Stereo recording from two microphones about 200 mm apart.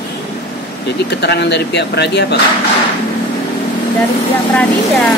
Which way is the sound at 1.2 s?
55° left (ahead or behind).